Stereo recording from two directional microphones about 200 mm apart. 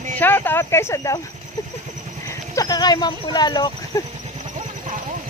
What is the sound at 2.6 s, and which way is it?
Speech, 20° left (ahead or behind).